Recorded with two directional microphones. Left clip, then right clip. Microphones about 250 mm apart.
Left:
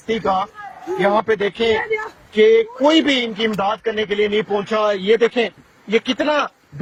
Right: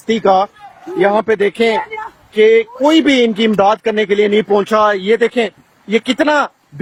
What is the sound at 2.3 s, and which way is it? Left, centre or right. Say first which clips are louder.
Speech: right 3 dB; right.